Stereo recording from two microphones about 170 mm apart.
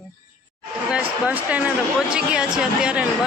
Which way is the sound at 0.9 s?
10° right (ahead or behind).